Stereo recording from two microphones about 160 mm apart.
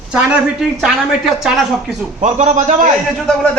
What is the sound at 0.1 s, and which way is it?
A woman's voice, 5° right (ahead or behind).